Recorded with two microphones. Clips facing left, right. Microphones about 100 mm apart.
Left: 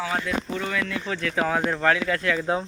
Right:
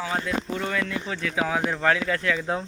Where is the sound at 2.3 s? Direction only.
5° left (ahead or behind).